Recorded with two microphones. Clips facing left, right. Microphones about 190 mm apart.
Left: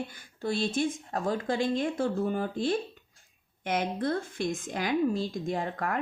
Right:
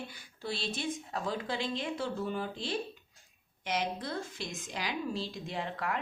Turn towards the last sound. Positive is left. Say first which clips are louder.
# left 5 dB
turn(degrees=45)  # may be behind; listen again after turning